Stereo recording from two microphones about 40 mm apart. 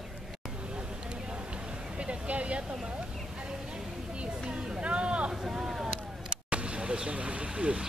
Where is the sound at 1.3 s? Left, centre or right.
Right.